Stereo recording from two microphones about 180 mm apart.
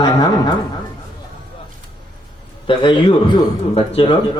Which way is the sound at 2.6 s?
25° left (ahead or behind).